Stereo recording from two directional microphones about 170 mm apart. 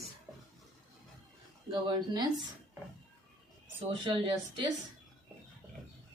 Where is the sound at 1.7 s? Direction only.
25° right (ahead or behind).